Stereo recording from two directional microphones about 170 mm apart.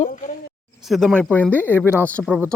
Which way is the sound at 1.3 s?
10° left (ahead or behind).